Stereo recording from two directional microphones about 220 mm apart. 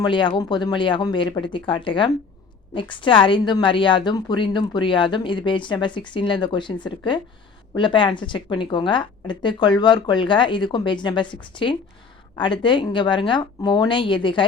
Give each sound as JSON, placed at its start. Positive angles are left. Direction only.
{"t": 0.0, "sound": "a woman's voice", "side_deg": 20}